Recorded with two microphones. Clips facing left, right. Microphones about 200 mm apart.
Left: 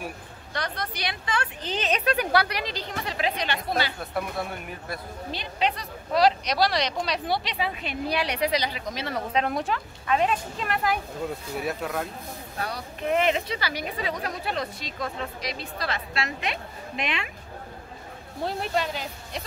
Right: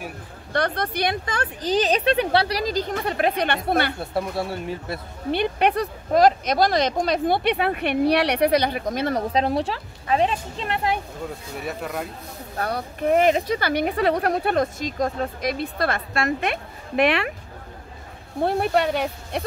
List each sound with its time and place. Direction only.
0.5 s speech: 55° right (ahead or behind)
4.0 s speech: 30° right (ahead or behind)
5.3 s speech: 60° right (ahead or behind)
9.3 s a woman's voice: 30° right (ahead or behind)
11.6 s speech: centre (ahead or behind)
12.5 s speech: 55° right (ahead or behind)
18.4 s speech: 60° right (ahead or behind)